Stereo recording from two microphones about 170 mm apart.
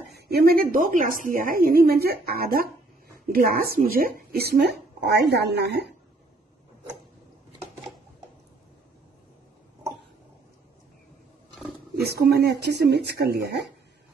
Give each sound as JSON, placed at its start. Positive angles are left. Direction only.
{"t": 0.1, "sound": "a woman's voice", "side_deg": -65}
{"t": 12.0, "sound": "speech", "side_deg": -70}